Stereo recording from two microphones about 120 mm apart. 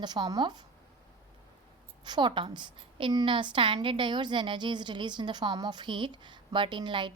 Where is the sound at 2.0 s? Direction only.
40° right (ahead or behind).